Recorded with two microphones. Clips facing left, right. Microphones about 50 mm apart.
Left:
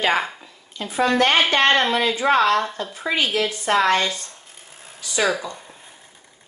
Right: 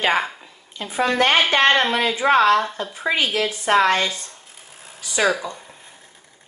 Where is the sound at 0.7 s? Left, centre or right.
Right; by 5.8 s centre.